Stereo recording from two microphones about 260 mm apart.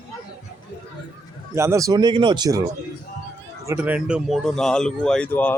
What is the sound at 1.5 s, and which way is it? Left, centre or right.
Speech, centre.